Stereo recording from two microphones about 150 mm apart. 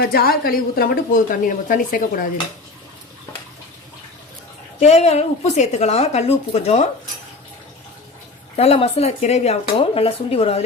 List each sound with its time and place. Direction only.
0.0 s speech: 90° left; by 2.2 s 70° left (ahead or behind)
4.8 s a woman's voice: 45° left (ahead or behind)
8.5 s a woman's voice: 40° left (ahead or behind)